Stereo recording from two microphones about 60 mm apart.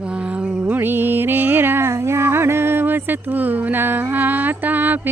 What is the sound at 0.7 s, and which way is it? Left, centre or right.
Music, right.